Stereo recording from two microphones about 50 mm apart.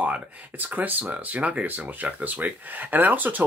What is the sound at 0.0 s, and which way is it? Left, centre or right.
Speech, right.